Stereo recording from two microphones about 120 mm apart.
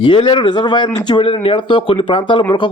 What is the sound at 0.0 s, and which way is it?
A man's voice, 40° left (ahead or behind).